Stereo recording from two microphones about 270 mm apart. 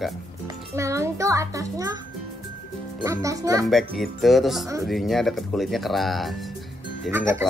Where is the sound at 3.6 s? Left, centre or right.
Centre.